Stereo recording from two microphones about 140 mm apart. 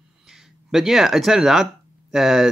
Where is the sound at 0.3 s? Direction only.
5° right (ahead or behind).